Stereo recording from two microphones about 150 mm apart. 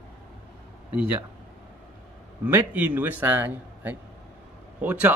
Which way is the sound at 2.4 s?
10° right (ahead or behind).